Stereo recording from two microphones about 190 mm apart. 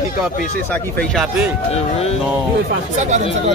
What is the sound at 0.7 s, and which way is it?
Speech, 5° left (ahead or behind).